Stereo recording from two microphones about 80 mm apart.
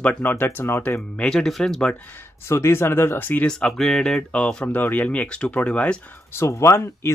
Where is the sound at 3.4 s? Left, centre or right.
Centre.